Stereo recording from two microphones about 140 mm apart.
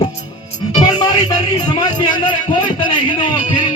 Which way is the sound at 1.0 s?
30° left (ahead or behind).